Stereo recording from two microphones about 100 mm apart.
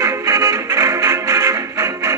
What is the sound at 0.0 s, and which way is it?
Music, 30° right (ahead or behind).